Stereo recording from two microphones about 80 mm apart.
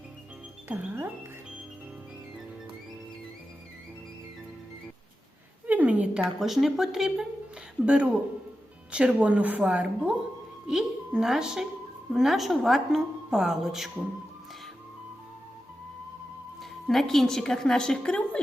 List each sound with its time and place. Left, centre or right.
0.7 s speech: right
5.6 s a sound: centre
6.4 s a woman's voice: centre
16.6 s a woman's voice: centre